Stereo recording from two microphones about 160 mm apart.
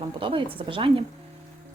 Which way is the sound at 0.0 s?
35° right (ahead or behind).